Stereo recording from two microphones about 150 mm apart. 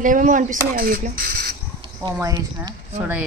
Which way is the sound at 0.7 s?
75° right (ahead or behind).